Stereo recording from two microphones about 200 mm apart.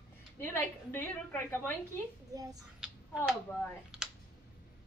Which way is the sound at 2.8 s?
5° right (ahead or behind).